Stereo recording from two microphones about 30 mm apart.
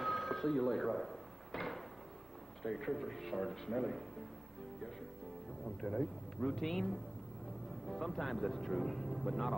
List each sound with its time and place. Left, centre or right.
0.0 s a sound: centre
2.6 s speech: centre
5.8 s speech: centre
6.3 s speech: centre